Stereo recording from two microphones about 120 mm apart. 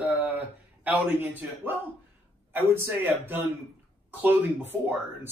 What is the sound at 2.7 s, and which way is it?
Speech, 15° right (ahead or behind).